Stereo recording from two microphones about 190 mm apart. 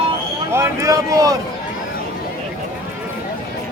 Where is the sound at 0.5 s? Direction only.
15° right (ahead or behind).